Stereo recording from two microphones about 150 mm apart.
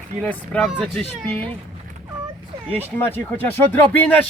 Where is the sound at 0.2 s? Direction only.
10° left (ahead or behind).